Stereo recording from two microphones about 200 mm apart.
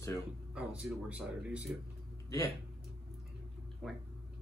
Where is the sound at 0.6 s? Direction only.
5° right (ahead or behind).